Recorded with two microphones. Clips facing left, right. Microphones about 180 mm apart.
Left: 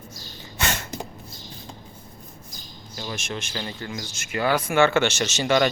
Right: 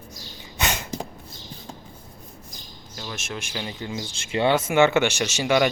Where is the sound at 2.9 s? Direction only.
Centre (ahead or behind).